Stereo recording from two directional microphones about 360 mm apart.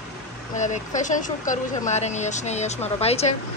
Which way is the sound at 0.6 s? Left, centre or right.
Left.